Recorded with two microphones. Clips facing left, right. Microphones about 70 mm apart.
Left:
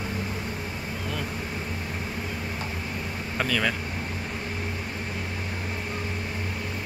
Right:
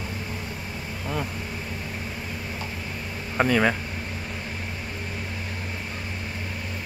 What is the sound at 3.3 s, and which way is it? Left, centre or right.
Speech, right.